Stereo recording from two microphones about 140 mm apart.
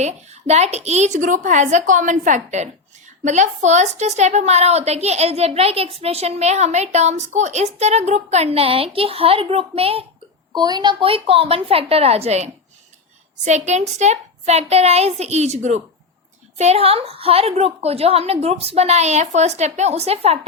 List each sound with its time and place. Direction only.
0.0 s a woman's voice: 55° right (ahead or behind)
10.5 s a woman's voice: 30° right (ahead or behind); by 20.5 s 45° right (ahead or behind)